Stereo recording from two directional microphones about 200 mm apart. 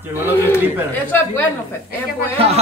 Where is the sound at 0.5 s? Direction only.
10° left (ahead or behind).